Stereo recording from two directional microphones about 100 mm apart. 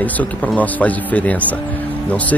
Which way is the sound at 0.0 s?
15° left (ahead or behind).